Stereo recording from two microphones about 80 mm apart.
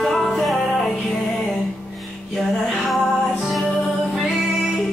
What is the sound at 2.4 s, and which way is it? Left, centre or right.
Music, centre.